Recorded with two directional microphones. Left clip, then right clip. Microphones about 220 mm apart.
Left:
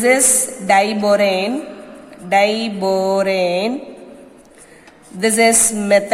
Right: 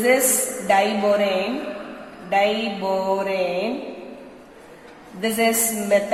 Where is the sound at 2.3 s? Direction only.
50° left (ahead or behind).